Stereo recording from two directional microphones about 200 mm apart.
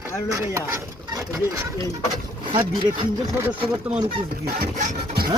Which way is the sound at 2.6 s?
15° right (ahead or behind).